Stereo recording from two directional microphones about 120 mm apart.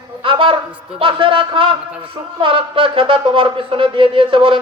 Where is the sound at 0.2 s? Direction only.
45° right (ahead or behind).